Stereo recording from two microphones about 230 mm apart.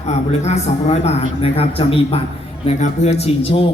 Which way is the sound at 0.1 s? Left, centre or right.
Left.